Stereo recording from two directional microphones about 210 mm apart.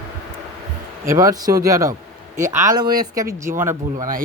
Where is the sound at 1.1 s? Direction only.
15° right (ahead or behind).